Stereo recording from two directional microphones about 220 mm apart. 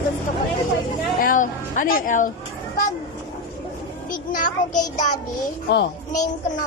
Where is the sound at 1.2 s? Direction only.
40° left (ahead or behind).